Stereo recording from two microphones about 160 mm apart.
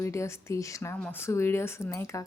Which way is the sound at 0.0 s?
20° left (ahead or behind).